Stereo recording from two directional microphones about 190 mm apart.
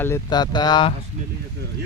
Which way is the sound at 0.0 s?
15° left (ahead or behind).